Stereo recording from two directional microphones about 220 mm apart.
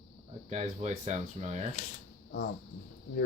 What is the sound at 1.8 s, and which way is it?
Speech, 30° left (ahead or behind).